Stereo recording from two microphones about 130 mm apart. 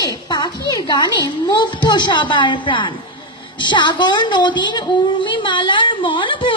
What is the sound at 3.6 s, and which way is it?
A woman's voice, 35° left (ahead or behind).